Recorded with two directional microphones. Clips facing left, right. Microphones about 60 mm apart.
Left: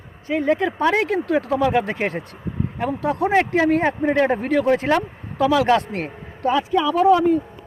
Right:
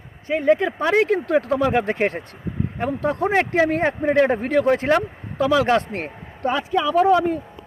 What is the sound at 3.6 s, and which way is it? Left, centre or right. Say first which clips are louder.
Speech: right 1 dB; right.